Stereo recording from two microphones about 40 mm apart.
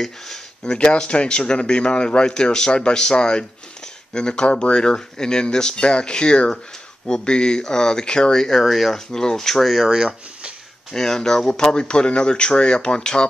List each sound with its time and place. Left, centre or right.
0.0 s a sound: centre
0.7 s speech: left; by 9.8 s centre
9.8 s speech: right
10.9 s speech: centre